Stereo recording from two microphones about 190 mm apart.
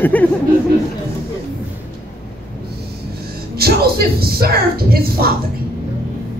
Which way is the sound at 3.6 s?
55° right (ahead or behind).